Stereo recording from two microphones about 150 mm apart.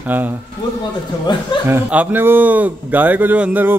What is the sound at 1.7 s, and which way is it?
Speech, 10° right (ahead or behind).